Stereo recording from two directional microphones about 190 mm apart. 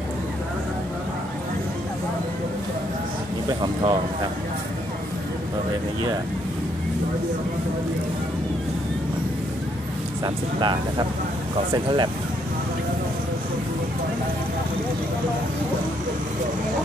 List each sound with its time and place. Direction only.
3.6 s speech: 25° right (ahead or behind)
10.2 s speech: 25° right (ahead or behind)